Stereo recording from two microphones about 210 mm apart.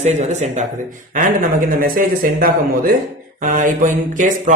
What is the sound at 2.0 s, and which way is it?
Speech, 40° right (ahead or behind).